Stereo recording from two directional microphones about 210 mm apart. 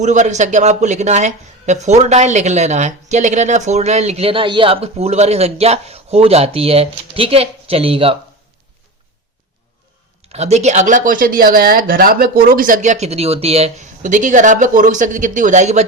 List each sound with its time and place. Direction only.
0.0 s a man's voice: 35° right (ahead or behind)
10.3 s a man's voice: 30° right (ahead or behind)